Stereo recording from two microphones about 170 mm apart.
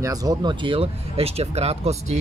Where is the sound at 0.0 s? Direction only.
20° right (ahead or behind).